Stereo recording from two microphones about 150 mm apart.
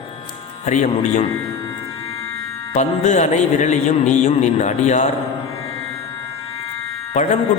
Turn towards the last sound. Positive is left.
turn(degrees=50)  # may be behind; listen again after turning